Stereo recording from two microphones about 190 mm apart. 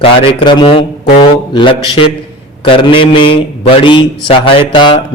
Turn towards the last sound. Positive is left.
turn(degrees=25)  # may be behind; listen again after turning